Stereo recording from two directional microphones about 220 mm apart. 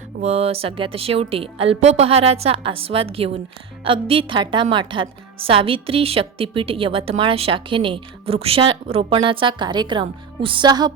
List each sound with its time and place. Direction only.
0.2 s a woman's voice: 25° right (ahead or behind)